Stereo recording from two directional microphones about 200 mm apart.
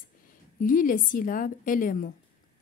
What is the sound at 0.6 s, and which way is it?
A woman's voice, 45° left (ahead or behind).